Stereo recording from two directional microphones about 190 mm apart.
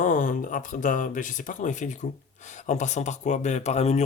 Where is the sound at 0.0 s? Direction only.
40° left (ahead or behind).